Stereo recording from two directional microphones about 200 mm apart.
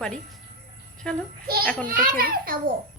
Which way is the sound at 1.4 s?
50° right (ahead or behind).